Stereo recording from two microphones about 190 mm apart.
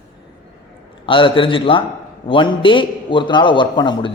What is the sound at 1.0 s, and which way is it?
A man's voice, 25° left (ahead or behind).